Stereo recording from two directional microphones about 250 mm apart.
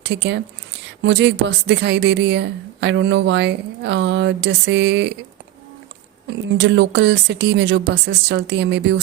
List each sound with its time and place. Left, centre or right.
0.0 s speech: right
6.6 s speech: right